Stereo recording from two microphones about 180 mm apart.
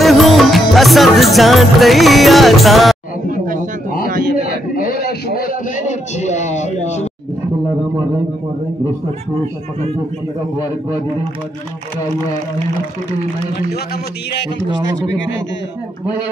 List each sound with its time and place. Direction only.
0.0 s music: centre (ahead or behind)
3.3 s a man's voice: 45° right (ahead or behind)
4.8 s a man's voice: 55° left (ahead or behind)
6.1 s speech: 40° left (ahead or behind)